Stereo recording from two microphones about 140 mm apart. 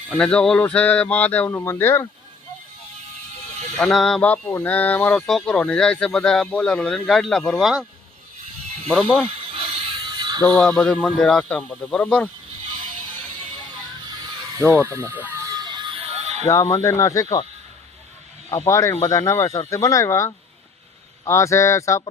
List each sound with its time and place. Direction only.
0.1 s speech: 10° left (ahead or behind)
3.8 s speech: 5° left (ahead or behind)
8.9 s speech: 5° left (ahead or behind)
9.6 s music: 40° right (ahead or behind)
10.4 s speech: 10° left (ahead or behind)
14.6 s speech: 15° right (ahead or behind)
15.5 s music: 30° right (ahead or behind); by 16.4 s 50° right (ahead or behind)
16.7 s speech: 20° left (ahead or behind)
18.7 s speech: 20° left (ahead or behind)